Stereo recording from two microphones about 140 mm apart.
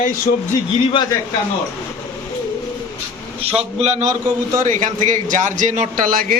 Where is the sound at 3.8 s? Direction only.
55° right (ahead or behind); by 6.3 s 85° right.